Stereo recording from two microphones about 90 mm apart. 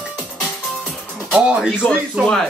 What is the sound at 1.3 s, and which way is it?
Speech, 15° right (ahead or behind).